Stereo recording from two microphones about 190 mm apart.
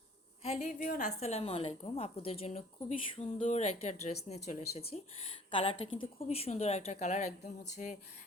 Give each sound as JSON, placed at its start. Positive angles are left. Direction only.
{"t": 0.7, "sound": "a woman's voice", "side_deg": 45}